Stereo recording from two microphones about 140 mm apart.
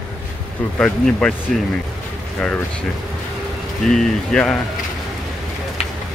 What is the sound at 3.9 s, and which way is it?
Speech, 5° left (ahead or behind).